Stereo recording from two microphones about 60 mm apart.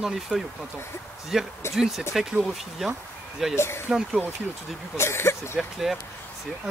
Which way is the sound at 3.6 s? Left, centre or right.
Left.